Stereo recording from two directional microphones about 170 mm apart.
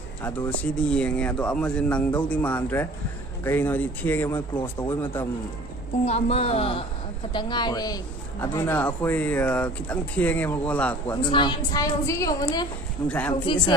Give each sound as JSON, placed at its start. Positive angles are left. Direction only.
{"t": 0.2, "sound": "speech", "side_deg": 10}
{"t": 6.0, "sound": "a woman's voice", "side_deg": 40}
{"t": 8.4, "sound": "speech", "side_deg": 10}
{"t": 11.2, "sound": "a woman's voice", "side_deg": 25}